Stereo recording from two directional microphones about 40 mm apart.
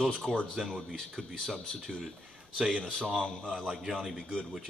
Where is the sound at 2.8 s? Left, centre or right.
Centre.